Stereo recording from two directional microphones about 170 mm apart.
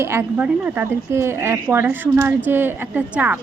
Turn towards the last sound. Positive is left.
turn(degrees=-10)  # may be behind; listen again after turning